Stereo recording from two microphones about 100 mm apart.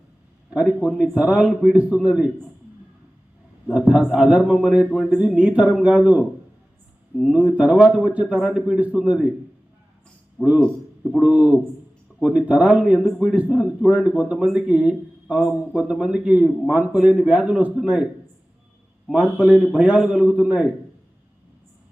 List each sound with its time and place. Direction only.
0.5 s speech: 10° right (ahead or behind)
3.7 s speech: 10° right (ahead or behind)
10.4 s speech: 10° right (ahead or behind)